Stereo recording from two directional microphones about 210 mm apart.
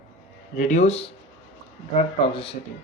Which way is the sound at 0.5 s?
35° left (ahead or behind).